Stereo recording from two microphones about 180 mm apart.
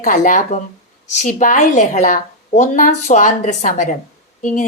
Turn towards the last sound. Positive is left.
turn(degrees=45)  # may be behind; listen again after turning